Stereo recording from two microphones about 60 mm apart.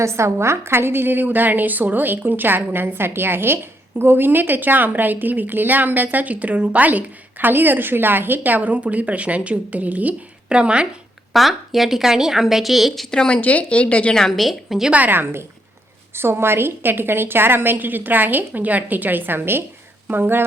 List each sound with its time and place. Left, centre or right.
0.0 s a woman's voice: right; by 10.8 s centre
11.3 s a woman's voice: centre
13.1 s speech: centre
13.4 s speech: left
14.2 s a woman's voice: centre
14.9 s a woman's voice: right